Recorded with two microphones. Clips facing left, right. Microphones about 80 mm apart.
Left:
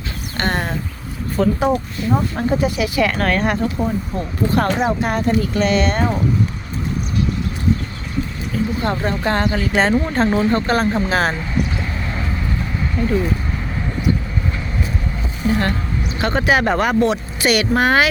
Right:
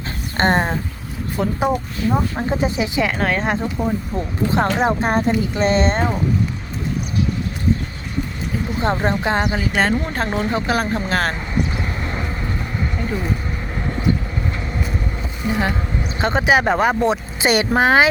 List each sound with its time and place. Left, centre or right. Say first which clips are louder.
0.3 s speech: right 4 dB; right
1.6 s speech: left 1 dB; centre
2.5 s speech: left 3 dB; right
3.8 s speech: left 1 dB; centre
4.5 s speech: even; right
8.8 s speech: right 5 dB; right
9.7 s speech: left 4 dB; centre
11.3 s vehicle: left 1 dB; centre
13.0 s speech: left 8 dB; centre
15.4 s speech: left 2 dB; centre
16.0 s speech: even; right
17.1 s speech: even; right
17.7 s speech: right 3 dB; centre